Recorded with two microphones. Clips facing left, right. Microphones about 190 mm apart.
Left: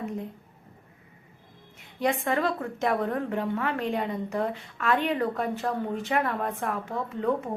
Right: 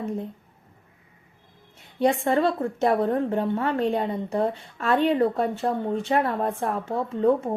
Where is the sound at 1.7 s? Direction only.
30° right (ahead or behind).